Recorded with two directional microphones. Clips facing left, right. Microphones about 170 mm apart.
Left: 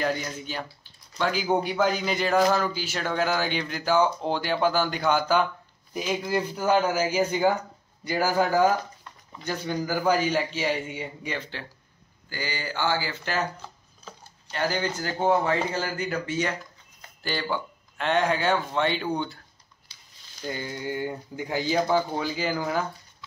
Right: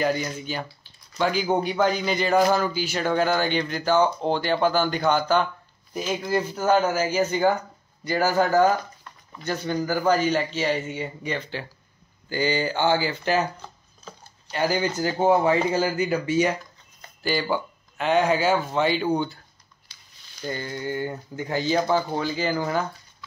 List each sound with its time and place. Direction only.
0.0 s a man's voice: 5° right (ahead or behind)
12.3 s speech: 25° right (ahead or behind)
13.6 s speech: 5° left (ahead or behind)
14.5 s speech: 10° right (ahead or behind)
20.4 s speech: 10° left (ahead or behind)